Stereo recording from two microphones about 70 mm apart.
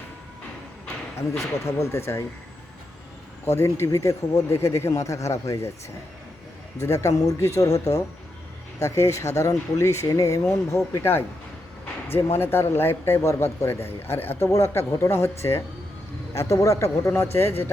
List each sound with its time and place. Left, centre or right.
1.5 s speech: left
3.4 s speech: left
3.8 s speech: left
6.7 s speech: left
7.3 s speech: left
10.7 s speech: left
12.0 s speech: left